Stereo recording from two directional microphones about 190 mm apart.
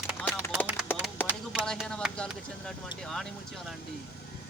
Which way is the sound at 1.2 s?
10° left (ahead or behind).